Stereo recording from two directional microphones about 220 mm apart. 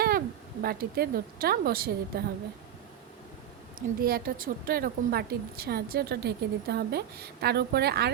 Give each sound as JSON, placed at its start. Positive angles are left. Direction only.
{"t": 0.6, "sound": "a woman's voice", "side_deg": -45}
{"t": 3.8, "sound": "a woman's voice", "side_deg": -40}